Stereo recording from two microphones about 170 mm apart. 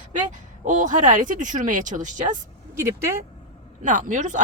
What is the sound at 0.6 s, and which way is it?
Speech, 50° right (ahead or behind).